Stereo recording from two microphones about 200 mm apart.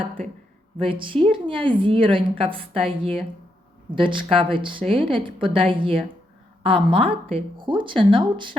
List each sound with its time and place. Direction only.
0.8 s a woman's voice: 25° right (ahead or behind)
3.9 s a woman's voice: 25° right (ahead or behind)